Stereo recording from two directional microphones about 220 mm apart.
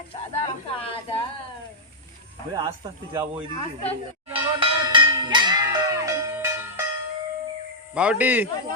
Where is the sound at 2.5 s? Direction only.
15° right (ahead or behind).